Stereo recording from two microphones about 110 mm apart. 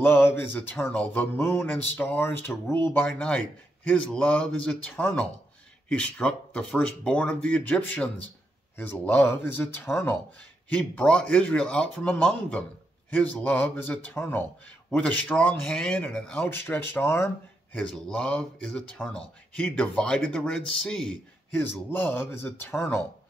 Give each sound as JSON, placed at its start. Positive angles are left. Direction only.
{"t": 0.0, "sound": "music", "side_deg": 20}
{"t": 4.1, "sound": "speech", "side_deg": 10}
{"t": 17.7, "sound": "speech", "side_deg": 5}
{"t": 22.0, "sound": "music", "side_deg": 20}